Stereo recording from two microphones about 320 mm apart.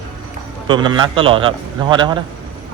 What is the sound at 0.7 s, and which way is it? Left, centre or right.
A man's voice, centre.